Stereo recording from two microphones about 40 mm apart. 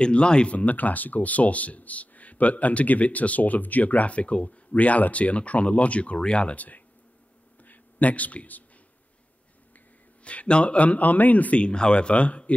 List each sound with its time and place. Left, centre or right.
0.0 s speech: left
6.5 s a man's voice: left
10.2 s speech: left
11.6 s speech: left